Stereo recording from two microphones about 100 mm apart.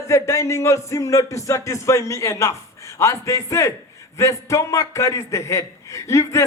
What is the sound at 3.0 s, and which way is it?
Speech, 30° left (ahead or behind).